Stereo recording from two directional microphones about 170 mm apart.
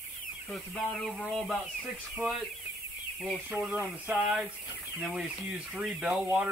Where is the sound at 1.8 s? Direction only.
10° right (ahead or behind).